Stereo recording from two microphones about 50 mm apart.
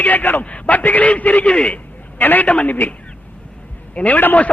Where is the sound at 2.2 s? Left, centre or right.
Left.